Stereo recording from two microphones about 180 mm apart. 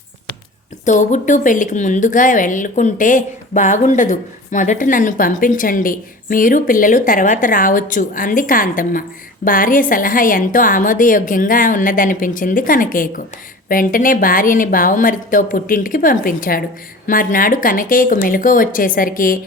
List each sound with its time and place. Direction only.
0.9 s a woman's voice: 45° left (ahead or behind)